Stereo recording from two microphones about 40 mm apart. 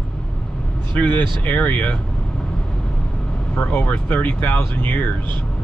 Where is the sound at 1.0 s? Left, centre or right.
Left.